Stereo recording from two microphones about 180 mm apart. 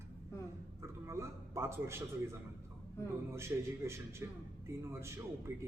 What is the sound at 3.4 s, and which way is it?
A man's voice, 15° right (ahead or behind).